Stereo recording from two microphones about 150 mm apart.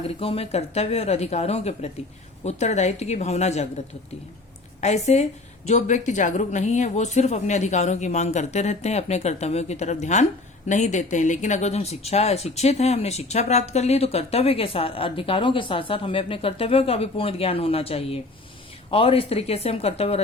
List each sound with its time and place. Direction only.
0.2 s speech: 40° left (ahead or behind)
4.8 s speech: 50° left (ahead or behind)